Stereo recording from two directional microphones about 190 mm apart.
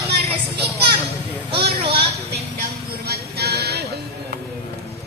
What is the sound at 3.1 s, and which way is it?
Music, 55° right (ahead or behind).